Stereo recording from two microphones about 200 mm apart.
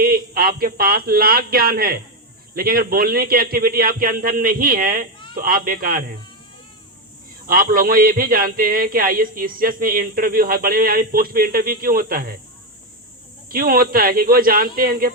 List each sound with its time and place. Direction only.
0.0 s a man's voice: 50° right (ahead or behind)
7.4 s a man's voice: 45° right (ahead or behind)
13.5 s a man's voice: 45° right (ahead or behind)